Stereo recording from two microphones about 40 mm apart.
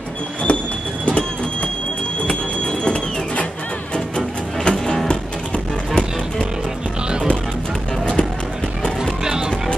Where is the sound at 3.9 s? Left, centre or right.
Left.